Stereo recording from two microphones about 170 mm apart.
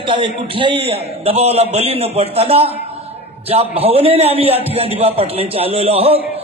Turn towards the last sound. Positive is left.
turn(degrees=-35)  # may be behind; listen again after turning